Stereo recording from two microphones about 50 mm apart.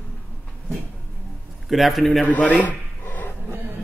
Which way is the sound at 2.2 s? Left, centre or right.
Left.